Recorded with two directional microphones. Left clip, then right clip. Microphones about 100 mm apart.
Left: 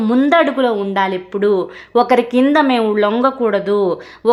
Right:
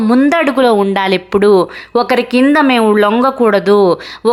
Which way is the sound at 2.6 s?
35° right (ahead or behind).